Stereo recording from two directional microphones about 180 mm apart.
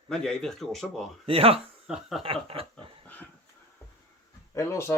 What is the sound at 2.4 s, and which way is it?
Chuckle, 30° right (ahead or behind).